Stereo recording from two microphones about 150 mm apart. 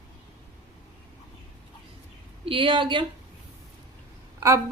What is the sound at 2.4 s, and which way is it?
Speech, 35° right (ahead or behind).